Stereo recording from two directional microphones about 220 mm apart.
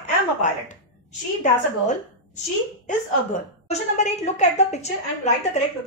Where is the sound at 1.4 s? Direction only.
35° left (ahead or behind).